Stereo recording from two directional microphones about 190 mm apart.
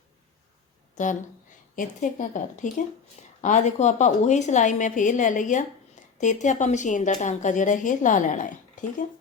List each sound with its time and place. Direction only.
1.0 s speech: 40° left (ahead or behind)